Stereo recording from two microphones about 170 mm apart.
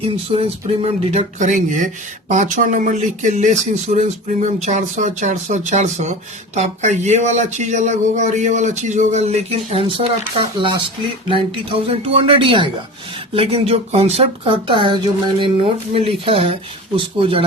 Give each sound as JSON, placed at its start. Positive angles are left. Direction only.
{"t": 0.0, "sound": "speech", "side_deg": -35}